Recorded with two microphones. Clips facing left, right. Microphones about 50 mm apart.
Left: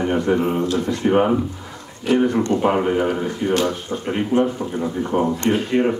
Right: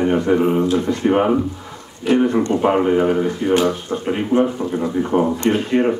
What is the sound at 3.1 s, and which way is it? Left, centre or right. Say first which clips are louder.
Speech: right 4 dB; centre.